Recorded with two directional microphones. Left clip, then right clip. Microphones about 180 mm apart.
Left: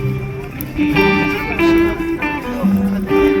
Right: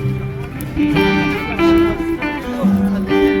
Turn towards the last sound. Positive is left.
turn(degrees=-5)  # may be behind; listen again after turning